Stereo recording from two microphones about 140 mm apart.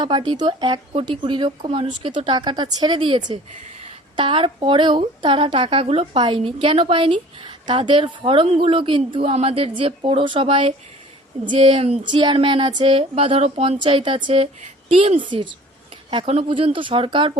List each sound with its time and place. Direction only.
0.0 s a woman's voice: 35° right (ahead or behind)
15.3 s a woman's voice: 35° right (ahead or behind)